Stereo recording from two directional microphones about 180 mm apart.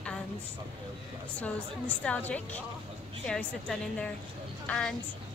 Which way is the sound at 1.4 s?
10° left (ahead or behind).